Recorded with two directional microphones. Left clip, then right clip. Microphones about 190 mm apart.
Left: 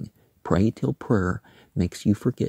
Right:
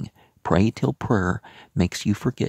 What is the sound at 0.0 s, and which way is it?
Speech, 20° right (ahead or behind).